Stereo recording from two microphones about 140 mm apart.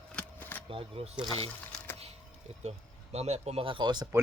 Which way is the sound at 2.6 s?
50° right (ahead or behind).